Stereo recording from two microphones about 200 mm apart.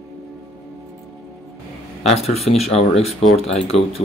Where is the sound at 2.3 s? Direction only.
30° left (ahead or behind).